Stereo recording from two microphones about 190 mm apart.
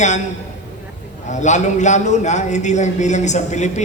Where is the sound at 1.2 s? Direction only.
40° left (ahead or behind).